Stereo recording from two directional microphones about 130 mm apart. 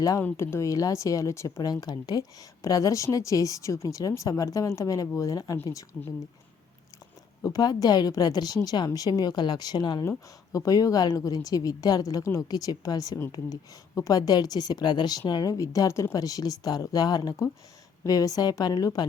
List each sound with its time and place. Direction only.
0.0 s speech: 25° left (ahead or behind)
7.4 s a woman's voice: 30° left (ahead or behind)